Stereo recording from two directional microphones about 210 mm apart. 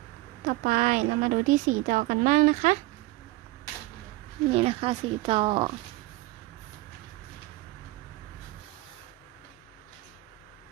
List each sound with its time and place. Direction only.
0.4 s speech: 40° right (ahead or behind)
4.5 s speech: 25° right (ahead or behind)